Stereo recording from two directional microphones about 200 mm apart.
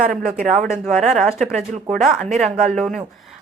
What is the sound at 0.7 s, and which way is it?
Speech, centre (ahead or behind).